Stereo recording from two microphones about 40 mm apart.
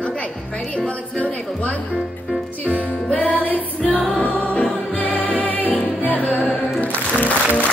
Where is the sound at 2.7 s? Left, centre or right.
Left.